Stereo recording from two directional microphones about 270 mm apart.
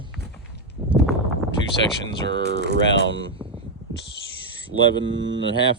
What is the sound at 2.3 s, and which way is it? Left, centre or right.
Speech, right.